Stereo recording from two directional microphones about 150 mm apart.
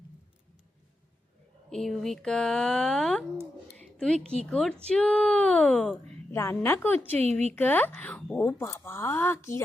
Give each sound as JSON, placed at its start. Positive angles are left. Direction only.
{"t": 1.7, "sound": "speech", "side_deg": 0}
{"t": 3.8, "sound": "a sound", "side_deg": 5}
{"t": 4.4, "sound": "speech", "side_deg": 5}
{"t": 6.3, "sound": "speech", "side_deg": 15}
{"t": 7.2, "sound": "a woman's voice", "side_deg": -45}
{"t": 7.5, "sound": "speech", "side_deg": 10}